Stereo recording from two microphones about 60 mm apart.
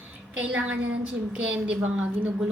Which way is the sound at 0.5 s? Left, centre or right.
Right.